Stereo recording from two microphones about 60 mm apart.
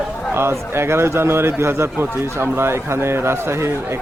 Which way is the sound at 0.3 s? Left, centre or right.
Right.